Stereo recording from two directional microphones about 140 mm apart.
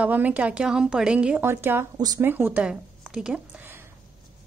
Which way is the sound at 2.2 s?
15° right (ahead or behind).